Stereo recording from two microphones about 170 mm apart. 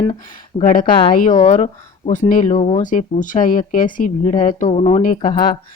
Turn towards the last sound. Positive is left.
turn(degrees=50)  # may be behind; listen again after turning